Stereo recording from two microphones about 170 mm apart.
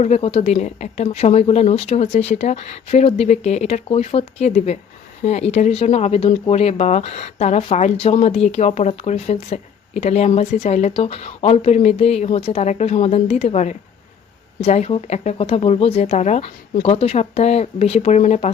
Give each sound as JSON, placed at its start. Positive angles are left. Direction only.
{"t": 0.0, "sound": "speech", "side_deg": 40}